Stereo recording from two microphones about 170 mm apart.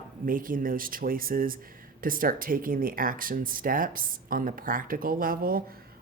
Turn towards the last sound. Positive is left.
turn(degrees=-55)  # may be behind; listen again after turning